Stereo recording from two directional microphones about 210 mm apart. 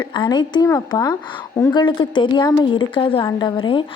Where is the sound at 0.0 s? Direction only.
20° left (ahead or behind).